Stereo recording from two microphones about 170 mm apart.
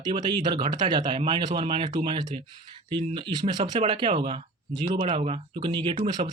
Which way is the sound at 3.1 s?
25° right (ahead or behind).